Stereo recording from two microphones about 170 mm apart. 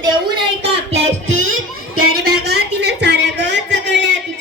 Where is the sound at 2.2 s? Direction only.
70° right (ahead or behind); by 4.1 s 90° right.